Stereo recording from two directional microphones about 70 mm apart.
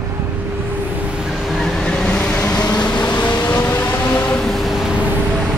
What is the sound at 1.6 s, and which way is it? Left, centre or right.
Vehicle, centre.